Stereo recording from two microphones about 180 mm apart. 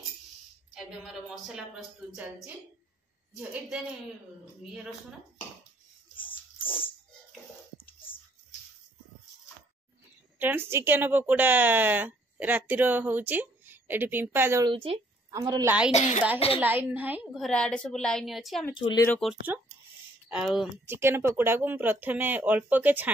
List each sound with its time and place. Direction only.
1.0 s a woman's voice: 5° right (ahead or behind)
6.1 s dog: 30° left (ahead or behind)
10.4 s speech: 10° right (ahead or behind)
14.7 s speech: 30° right (ahead or behind)
15.9 s a woman's voice: 35° left (ahead or behind)
16.5 s a woman's voice: 10° right (ahead or behind)
18.8 s speech: 25° left (ahead or behind)
19.0 s a woman's voice: centre (ahead or behind)
20.8 s speech: 15° right (ahead or behind)